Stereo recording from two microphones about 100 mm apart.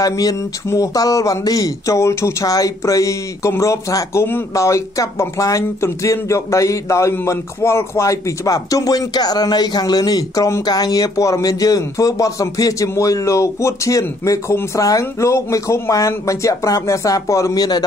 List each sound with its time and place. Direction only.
0.0 s speech: 35° left (ahead or behind)